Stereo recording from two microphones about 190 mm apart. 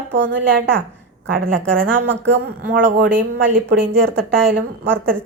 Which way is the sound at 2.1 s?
70° right (ahead or behind).